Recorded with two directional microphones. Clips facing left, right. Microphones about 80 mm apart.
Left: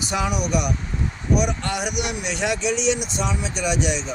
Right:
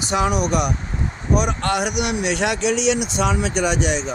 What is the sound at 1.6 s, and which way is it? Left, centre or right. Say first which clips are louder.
A man's voice: right 5 dB; right.